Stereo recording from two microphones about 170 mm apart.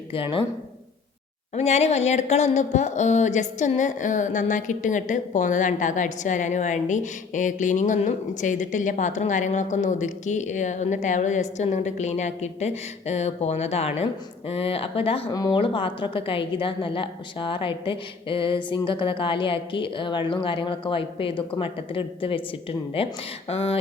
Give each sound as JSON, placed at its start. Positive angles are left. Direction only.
{"t": 0.1, "sound": "a woman's voice", "side_deg": 30}
{"t": 1.5, "sound": "speech", "side_deg": 40}
{"t": 15.3, "sound": "a woman's voice", "side_deg": 20}